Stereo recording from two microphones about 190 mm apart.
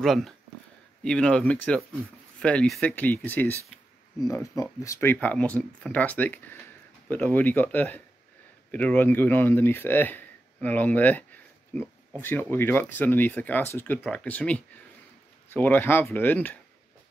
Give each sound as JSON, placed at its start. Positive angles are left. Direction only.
{"t": 0.0, "sound": "speech", "side_deg": 0}